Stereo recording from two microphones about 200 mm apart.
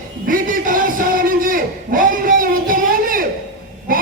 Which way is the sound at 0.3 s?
45° right (ahead or behind).